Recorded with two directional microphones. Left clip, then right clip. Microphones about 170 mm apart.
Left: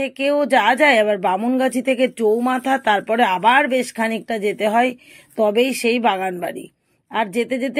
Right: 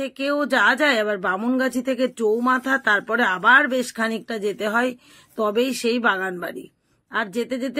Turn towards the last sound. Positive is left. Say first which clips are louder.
# left 5 dB
turn(degrees=10)  # may be behind; listen again after turning